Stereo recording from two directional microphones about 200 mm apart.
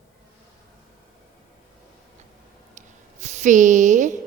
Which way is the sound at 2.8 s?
35° right (ahead or behind).